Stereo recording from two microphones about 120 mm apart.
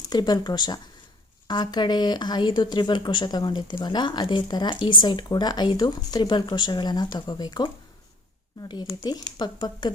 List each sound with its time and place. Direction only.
0.1 s speech: 35° left (ahead or behind)